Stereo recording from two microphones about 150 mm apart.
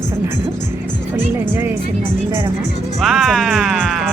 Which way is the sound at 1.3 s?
15° right (ahead or behind).